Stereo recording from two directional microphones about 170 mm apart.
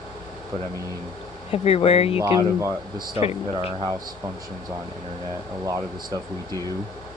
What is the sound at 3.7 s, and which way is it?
Speech, 25° right (ahead or behind).